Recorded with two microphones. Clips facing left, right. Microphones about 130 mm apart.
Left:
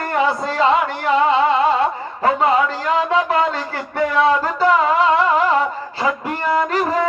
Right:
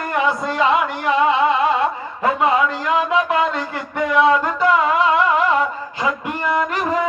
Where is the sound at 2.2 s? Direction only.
30° left (ahead or behind).